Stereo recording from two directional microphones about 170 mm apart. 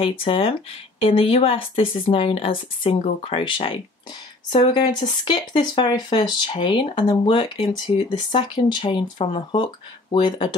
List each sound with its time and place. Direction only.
0.0 s speech: 30° left (ahead or behind)